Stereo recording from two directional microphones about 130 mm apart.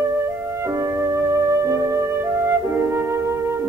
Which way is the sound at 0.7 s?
25° right (ahead or behind).